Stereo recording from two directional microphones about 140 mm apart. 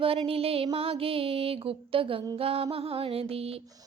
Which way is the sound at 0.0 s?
40° right (ahead or behind).